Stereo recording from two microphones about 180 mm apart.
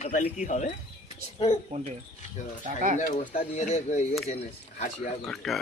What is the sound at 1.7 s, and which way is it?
Speech, 45° right (ahead or behind).